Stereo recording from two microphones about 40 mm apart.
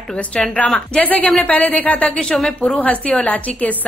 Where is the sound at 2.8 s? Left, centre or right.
Left.